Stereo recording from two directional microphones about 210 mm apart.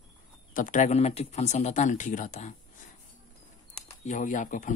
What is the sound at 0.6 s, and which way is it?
Speech, 35° left (ahead or behind).